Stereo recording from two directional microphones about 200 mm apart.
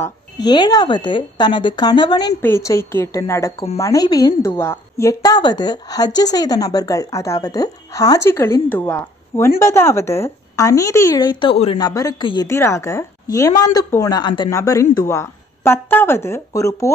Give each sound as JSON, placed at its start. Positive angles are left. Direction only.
{"t": 0.0, "sound": "a woman's voice", "side_deg": 20}